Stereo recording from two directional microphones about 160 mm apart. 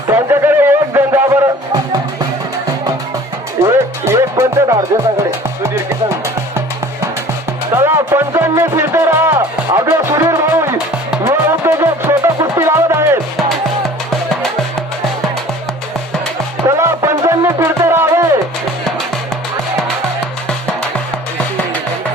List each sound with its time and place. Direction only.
0.1 s music: 15° right (ahead or behind)
3.6 s music: 15° right (ahead or behind)
5.6 s speech: 15° right (ahead or behind)
7.7 s speech: 15° right (ahead or behind)
11.4 s music: 15° right (ahead or behind)
13.8 s music: centre (ahead or behind)
16.6 s music: 20° right (ahead or behind)